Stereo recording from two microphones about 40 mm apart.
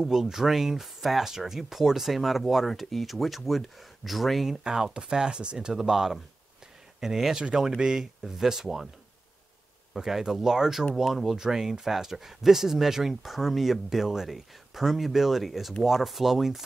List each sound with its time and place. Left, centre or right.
0.0 s speech: centre
4.6 s speech: centre
5.8 s speech: centre
9.9 s speech: centre